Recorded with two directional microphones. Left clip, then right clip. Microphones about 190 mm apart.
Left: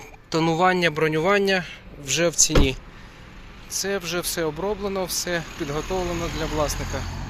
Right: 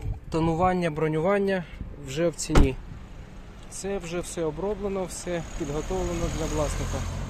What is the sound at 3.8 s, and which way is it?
Speech, 5° left (ahead or behind).